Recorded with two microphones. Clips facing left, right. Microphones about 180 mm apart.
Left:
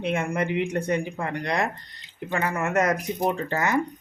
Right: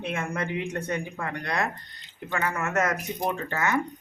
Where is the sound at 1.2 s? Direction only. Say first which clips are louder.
Left 3 dB; 30° left (ahead or behind).